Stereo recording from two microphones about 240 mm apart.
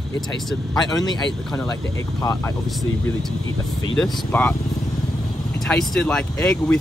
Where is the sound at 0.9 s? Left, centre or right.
Centre.